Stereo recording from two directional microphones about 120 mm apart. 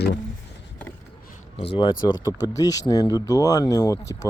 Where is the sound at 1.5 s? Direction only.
40° left (ahead or behind).